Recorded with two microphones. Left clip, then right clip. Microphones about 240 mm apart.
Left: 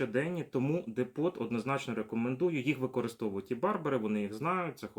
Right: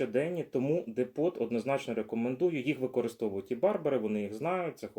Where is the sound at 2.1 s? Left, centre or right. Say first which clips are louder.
Right 1 dB; centre.